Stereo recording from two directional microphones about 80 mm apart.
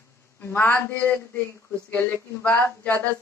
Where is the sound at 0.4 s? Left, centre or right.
Left.